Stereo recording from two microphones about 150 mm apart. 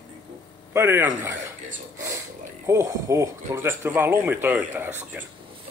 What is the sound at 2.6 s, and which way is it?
Speech, 20° right (ahead or behind).